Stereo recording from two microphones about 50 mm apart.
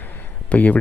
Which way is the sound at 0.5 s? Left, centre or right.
Left.